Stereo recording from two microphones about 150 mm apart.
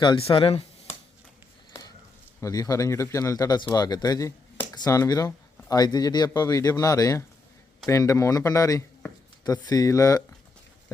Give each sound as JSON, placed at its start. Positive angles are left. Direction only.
{"t": 0.0, "sound": "speech", "side_deg": 35}
{"t": 2.4, "sound": "speech", "side_deg": 25}